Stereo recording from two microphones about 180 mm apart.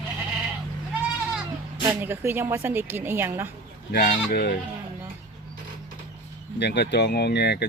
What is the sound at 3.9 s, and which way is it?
Speech, 55° left (ahead or behind).